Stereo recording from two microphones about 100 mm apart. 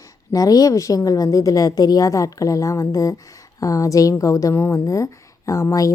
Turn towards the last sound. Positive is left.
turn(degrees=35)  # may be behind; listen again after turning